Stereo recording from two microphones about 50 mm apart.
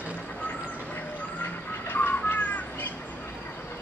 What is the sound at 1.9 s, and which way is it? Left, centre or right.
Bird, left.